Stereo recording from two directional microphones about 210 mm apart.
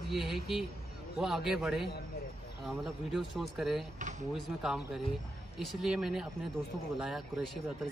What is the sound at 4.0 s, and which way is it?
Speech, 35° right (ahead or behind).